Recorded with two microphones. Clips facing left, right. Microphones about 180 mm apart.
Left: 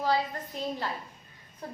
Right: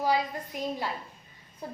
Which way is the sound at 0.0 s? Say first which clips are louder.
Right 1 dB; 15° right (ahead or behind).